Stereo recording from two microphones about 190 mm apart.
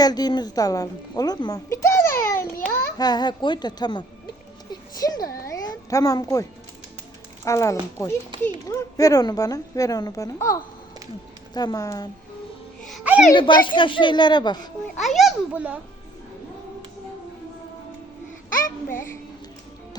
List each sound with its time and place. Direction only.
0.0 s a woman's voice: 20° left (ahead or behind)
4.7 s a sound: 20° left (ahead or behind)
7.4 s a woman's voice: 15° left (ahead or behind)
12.9 s babbling: 5° right (ahead or behind)
13.3 s a woman's voice: 25° left (ahead or behind)
15.0 s a child's voice: centre (ahead or behind)
18.5 s a child's voice: 45° left (ahead or behind)